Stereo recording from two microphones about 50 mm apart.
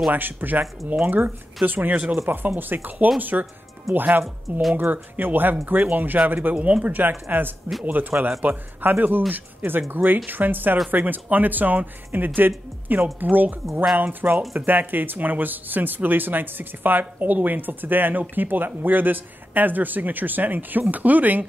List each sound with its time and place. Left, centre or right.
0.1 s speech: right
4.2 s speech: centre
4.7 s speech: right
6.5 s speech: right